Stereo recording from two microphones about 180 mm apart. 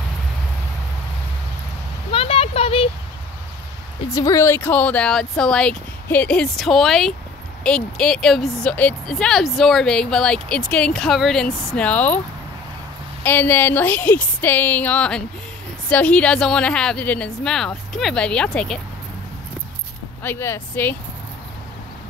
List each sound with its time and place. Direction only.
2.0 s a sound: 30° left (ahead or behind)
4.1 s speech: 20° left (ahead or behind)
13.2 s a woman's voice: 10° left (ahead or behind)
20.2 s a woman's voice: 15° left (ahead or behind)